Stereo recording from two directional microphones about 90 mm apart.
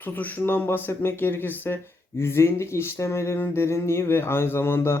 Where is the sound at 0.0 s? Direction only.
20° left (ahead or behind).